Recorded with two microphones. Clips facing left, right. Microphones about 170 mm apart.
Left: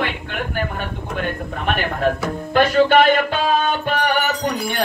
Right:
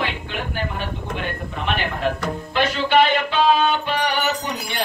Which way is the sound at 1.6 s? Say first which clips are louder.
Left 3 dB; 45° left (ahead or behind).